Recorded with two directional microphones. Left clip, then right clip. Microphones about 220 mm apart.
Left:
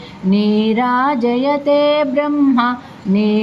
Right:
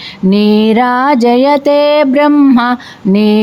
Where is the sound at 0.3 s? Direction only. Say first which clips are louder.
Right 7 dB; 50° right (ahead or behind).